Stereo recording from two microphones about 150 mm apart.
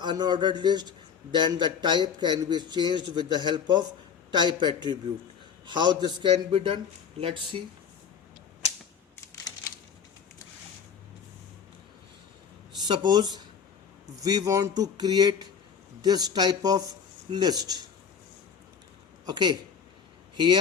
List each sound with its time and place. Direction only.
0.0 s a man's voice: 30° right (ahead or behind)
12.8 s a man's voice: 30° right (ahead or behind)
19.2 s a man's voice: 30° right (ahead or behind)